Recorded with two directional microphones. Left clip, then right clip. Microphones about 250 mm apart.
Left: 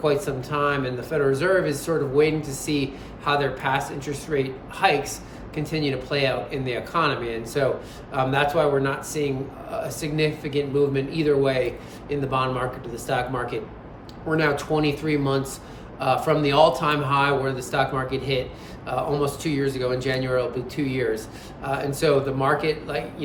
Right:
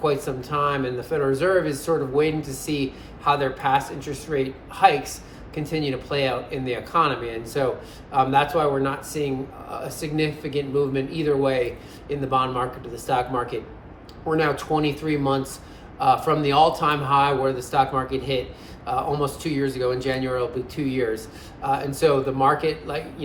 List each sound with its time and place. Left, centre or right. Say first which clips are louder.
0.0 s speech: left 1 dB; centre